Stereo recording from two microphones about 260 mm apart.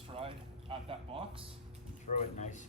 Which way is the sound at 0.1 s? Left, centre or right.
Right.